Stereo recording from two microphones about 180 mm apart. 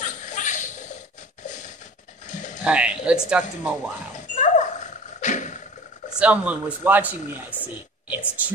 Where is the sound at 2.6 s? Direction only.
5° right (ahead or behind).